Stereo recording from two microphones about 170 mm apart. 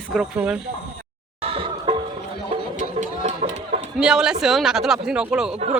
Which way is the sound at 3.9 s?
5° right (ahead or behind).